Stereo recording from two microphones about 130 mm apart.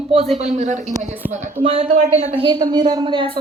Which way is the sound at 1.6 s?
50° right (ahead or behind).